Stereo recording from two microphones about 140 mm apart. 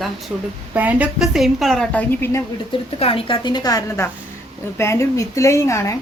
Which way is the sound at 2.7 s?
40° left (ahead or behind).